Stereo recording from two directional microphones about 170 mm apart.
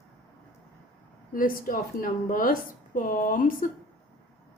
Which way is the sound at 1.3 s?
55° left (ahead or behind).